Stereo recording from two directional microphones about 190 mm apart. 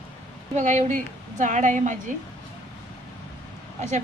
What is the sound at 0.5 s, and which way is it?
A woman's voice, 40° right (ahead or behind).